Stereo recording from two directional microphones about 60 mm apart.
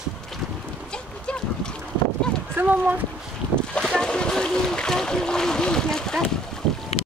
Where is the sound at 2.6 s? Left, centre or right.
Right.